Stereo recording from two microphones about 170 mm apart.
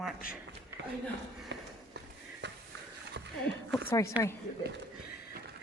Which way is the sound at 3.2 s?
90° right.